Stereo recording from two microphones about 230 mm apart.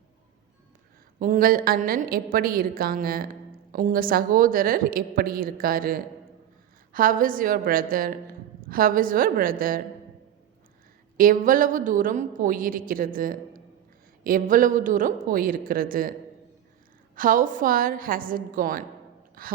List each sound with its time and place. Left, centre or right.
1.2 s a woman's voice: right
11.2 s a woman's voice: right
17.2 s a woman's voice: right